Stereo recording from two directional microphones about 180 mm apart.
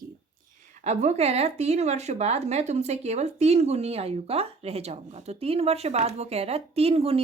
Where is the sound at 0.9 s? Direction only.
35° right (ahead or behind).